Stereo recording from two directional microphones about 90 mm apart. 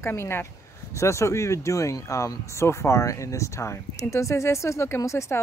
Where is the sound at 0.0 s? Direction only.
30° left (ahead or behind).